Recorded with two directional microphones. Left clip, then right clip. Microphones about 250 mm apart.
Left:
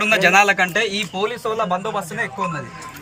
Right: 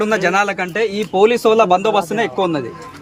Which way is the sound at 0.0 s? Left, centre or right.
Centre.